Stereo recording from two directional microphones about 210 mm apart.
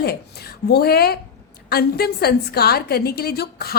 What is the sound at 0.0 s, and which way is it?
A woman's voice, 50° left (ahead or behind).